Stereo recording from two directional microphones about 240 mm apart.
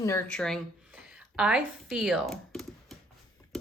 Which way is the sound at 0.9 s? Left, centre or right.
Centre.